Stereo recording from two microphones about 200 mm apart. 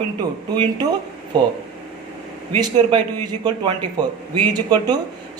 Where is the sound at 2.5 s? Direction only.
20° right (ahead or behind).